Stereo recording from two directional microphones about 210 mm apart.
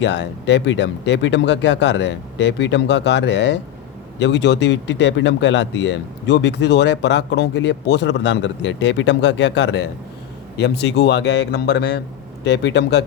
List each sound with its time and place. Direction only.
0.0 s a man's voice: 55° left (ahead or behind)